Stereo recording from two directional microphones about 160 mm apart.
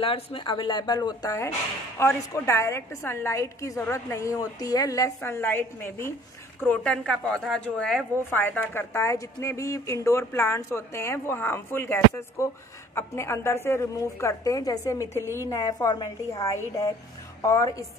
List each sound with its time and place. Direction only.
0.0 s a woman's voice: 35° left (ahead or behind)